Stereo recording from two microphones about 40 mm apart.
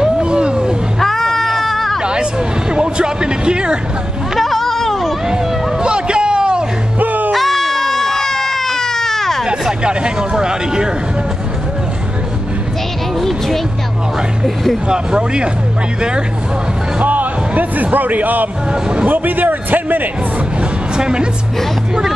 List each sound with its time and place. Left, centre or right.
0.0 s a sound: right
0.9 s music: centre
2.7 s music: right
4.4 s a sound: centre
5.3 s hubbub: right
7.0 s music: right
7.3 s baby cry: centre
9.8 s a sound: right
14.4 s speech: centre
14.9 s speech: right
17.0 s speech: right
18.7 s speech: right
19.0 s a man's voice: right
20.9 s a woman's voice: right